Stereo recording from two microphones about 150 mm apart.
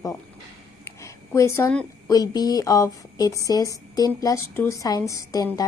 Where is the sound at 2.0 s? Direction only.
25° left (ahead or behind).